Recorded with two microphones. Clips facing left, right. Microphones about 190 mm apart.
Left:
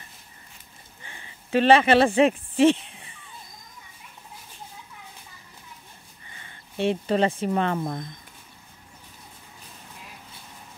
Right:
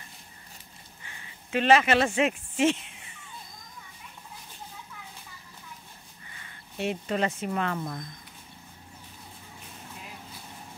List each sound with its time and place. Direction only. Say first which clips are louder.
1.0 s speech: left 4 dB; 30° left (ahead or behind)
6.3 s speech: left 5 dB; 30° left (ahead or behind)